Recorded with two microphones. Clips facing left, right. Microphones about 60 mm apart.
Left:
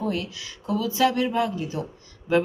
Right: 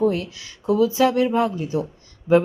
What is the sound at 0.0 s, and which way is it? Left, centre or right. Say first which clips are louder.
A woman's voice: right 7 dB; right.